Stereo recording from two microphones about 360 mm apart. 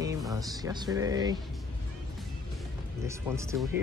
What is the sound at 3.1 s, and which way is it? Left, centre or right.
Speech, centre.